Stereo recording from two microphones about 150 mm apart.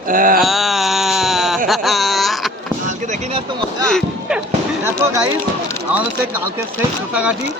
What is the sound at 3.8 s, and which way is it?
Speech, 5° left (ahead or behind).